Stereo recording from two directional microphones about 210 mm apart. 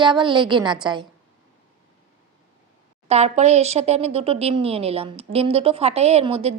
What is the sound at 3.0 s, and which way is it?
Speech, 30° right (ahead or behind).